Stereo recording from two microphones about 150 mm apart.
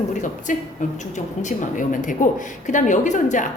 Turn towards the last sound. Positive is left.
turn(degrees=55)  # may be behind; listen again after turning